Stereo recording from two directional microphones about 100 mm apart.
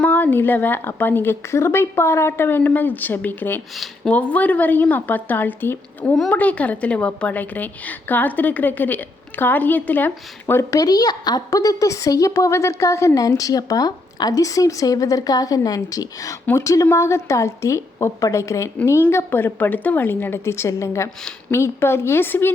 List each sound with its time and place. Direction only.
0.0 s a woman's voice: 20° left (ahead or behind)
10.4 s a woman's voice: 30° left (ahead or behind)